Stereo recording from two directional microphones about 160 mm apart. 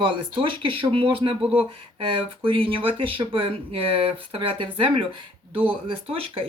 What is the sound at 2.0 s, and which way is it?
Speech, 35° right (ahead or behind).